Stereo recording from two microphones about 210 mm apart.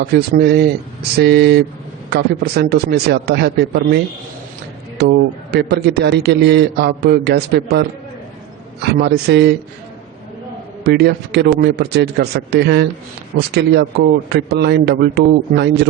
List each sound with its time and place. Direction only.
0.0 s a man's voice: 50° right (ahead or behind)
10.8 s a man's voice: 50° right (ahead or behind)